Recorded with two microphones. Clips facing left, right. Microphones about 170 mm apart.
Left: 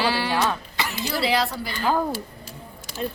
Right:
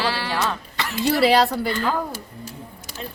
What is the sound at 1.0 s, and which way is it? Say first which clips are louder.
Speech: right 7 dB; 65° right (ahead or behind).